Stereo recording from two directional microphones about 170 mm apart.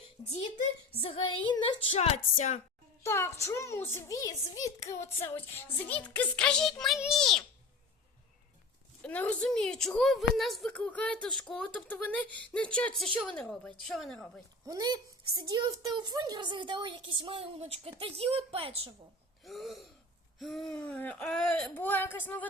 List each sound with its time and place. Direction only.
0.3 s speech: 45° left (ahead or behind)
1.0 s music: 30° left (ahead or behind)
3.0 s a woman's voice: 15° left (ahead or behind)
9.0 s a woman's voice: 10° left (ahead or behind)
14.7 s a woman's voice: 25° right (ahead or behind)
19.5 s a woman's voice: centre (ahead or behind)